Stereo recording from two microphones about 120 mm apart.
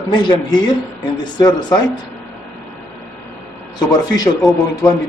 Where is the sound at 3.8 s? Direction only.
30° left (ahead or behind).